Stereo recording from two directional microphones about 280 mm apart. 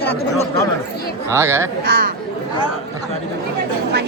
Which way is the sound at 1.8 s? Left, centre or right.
Right.